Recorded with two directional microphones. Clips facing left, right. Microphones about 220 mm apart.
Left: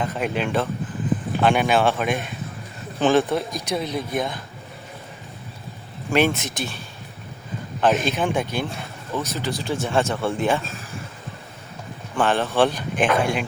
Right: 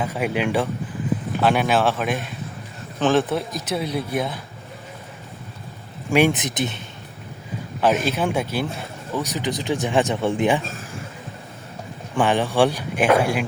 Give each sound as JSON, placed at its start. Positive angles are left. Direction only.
{"t": 0.0, "sound": "speech", "side_deg": -10}
{"t": 6.1, "sound": "speech", "side_deg": -15}
{"t": 7.8, "sound": "speech", "side_deg": -10}
{"t": 12.1, "sound": "speech", "side_deg": -15}